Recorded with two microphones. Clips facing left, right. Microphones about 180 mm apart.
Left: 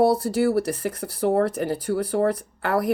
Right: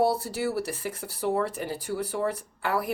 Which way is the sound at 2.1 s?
45° left (ahead or behind).